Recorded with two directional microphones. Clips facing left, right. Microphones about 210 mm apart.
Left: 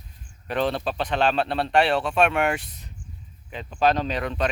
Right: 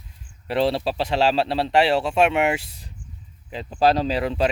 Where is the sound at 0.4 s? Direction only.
30° right (ahead or behind).